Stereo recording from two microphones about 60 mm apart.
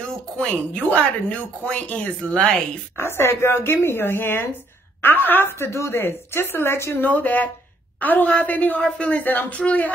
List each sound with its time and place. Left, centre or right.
0.5 s speech: left
3.0 s a woman's voice: left
5.5 s speech: left
7.0 s speech: left